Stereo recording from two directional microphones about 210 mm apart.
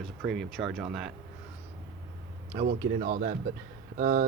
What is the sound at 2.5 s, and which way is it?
Speech, 35° right (ahead or behind).